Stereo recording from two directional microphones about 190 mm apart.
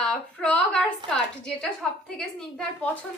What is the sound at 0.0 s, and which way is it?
A woman's voice, 5° left (ahead or behind).